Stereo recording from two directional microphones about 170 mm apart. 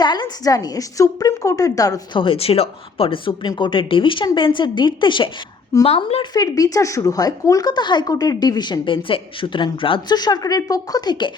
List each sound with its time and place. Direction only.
0.0 s a woman's voice: 25° left (ahead or behind)
6.4 s a woman's voice: 20° left (ahead or behind)